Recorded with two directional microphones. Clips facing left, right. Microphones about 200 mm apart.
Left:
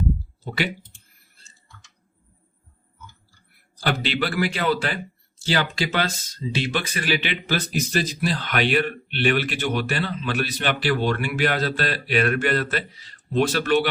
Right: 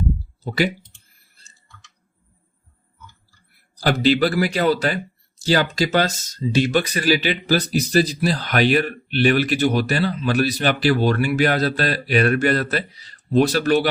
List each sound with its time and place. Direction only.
3.8 s speech: 40° right (ahead or behind)